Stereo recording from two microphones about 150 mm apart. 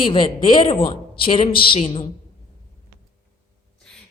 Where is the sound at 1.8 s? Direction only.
40° left (ahead or behind).